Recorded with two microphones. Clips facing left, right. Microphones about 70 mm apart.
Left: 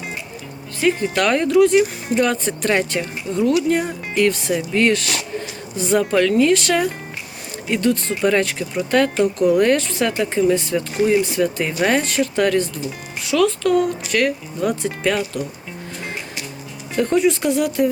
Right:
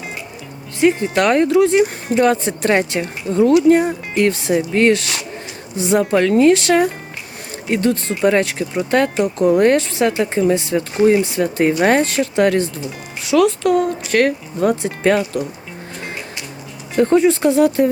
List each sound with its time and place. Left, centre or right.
0.8 s a woman's voice: centre
14.2 s speech: right
17.0 s speech: right